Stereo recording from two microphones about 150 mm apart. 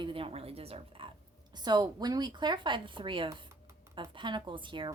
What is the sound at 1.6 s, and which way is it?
A woman's voice, 30° right (ahead or behind).